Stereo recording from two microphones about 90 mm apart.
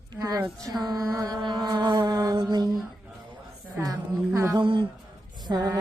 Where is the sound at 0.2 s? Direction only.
45° right (ahead or behind).